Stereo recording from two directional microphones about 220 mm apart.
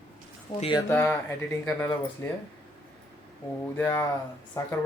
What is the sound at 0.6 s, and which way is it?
Speech, 20° left (ahead or behind).